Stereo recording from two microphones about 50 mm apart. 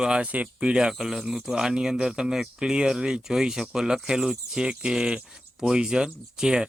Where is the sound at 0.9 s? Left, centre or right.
Centre.